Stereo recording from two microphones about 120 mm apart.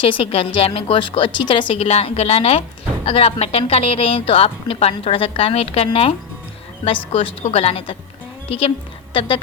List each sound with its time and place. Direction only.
0.0 s a woman's voice: 50° left (ahead or behind)